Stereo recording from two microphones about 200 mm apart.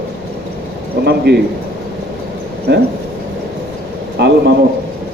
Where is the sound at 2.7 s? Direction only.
55° right (ahead or behind).